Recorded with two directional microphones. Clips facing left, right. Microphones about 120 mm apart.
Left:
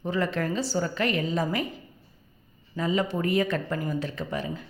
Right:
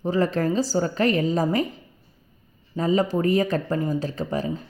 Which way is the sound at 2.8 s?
35° right (ahead or behind).